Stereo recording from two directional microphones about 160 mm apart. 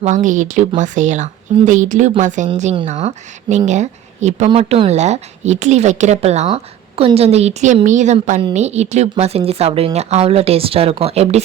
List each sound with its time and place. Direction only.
0.0 s a woman's voice: 50° right (ahead or behind)
4.4 s a woman's voice: 35° right (ahead or behind)